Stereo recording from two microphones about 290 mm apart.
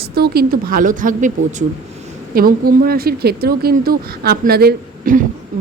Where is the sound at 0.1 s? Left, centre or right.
Right.